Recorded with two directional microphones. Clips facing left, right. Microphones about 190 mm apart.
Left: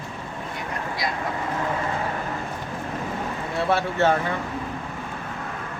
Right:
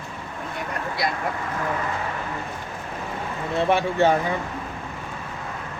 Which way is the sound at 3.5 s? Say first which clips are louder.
Right 2 dB; 15° right (ahead or behind).